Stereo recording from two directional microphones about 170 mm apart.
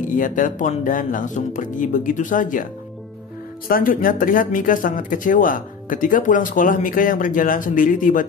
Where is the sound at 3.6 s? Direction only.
60° left (ahead or behind).